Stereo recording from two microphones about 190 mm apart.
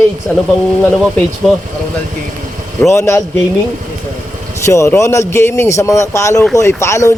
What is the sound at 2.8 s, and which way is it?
Speech, 15° left (ahead or behind).